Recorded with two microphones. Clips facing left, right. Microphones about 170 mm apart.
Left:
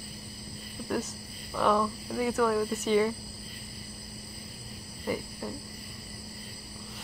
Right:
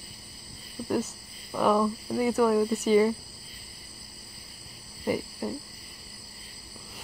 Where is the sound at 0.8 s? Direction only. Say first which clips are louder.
Right 4 dB; 5° right (ahead or behind).